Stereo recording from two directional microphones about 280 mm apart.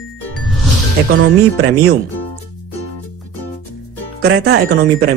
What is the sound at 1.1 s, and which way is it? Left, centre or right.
Speech, right.